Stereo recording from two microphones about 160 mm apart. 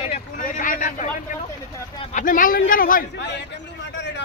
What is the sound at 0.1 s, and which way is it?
Vehicle, 60° left (ahead or behind).